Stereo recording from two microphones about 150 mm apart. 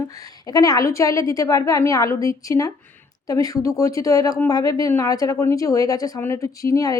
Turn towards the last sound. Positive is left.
turn(degrees=25)  # may be behind; listen again after turning